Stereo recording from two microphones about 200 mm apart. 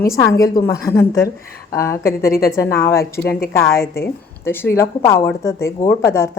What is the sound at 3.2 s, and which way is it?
Speech, 55° left (ahead or behind).